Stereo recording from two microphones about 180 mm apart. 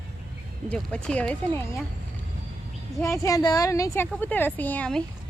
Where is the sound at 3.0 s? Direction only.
15° left (ahead or behind).